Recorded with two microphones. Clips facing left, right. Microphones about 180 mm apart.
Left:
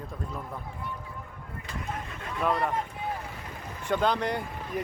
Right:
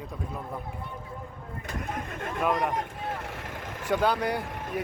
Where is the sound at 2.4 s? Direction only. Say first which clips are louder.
Even; centre (ahead or behind).